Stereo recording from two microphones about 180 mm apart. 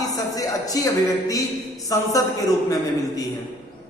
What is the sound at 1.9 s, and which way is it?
Speech, 20° left (ahead or behind).